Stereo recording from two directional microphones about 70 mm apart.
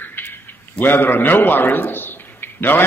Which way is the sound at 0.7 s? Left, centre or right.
Left.